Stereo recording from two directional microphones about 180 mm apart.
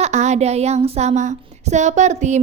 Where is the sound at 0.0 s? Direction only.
40° right (ahead or behind).